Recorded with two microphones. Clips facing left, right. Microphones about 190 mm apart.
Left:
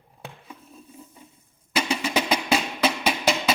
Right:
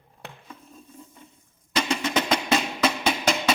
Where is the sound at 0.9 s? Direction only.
5° left (ahead or behind).